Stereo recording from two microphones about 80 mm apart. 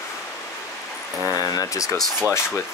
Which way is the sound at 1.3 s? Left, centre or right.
Left.